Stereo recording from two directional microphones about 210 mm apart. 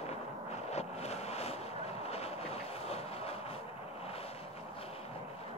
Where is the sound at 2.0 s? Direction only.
30° left (ahead or behind).